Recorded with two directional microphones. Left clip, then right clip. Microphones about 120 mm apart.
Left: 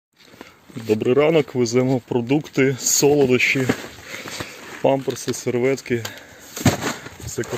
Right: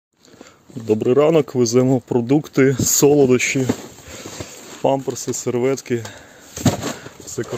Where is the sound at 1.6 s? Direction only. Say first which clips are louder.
Right 3 dB; 55° right (ahead or behind).